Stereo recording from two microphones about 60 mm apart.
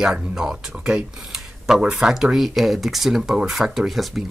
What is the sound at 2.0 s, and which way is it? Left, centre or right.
Speech, centre.